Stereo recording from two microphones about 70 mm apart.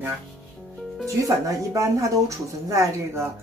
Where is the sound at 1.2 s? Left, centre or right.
Right.